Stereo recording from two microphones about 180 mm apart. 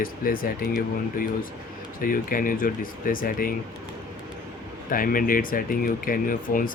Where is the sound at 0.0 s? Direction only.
55° left (ahead or behind).